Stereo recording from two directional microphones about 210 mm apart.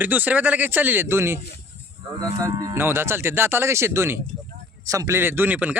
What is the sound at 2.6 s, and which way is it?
Speech, 10° right (ahead or behind).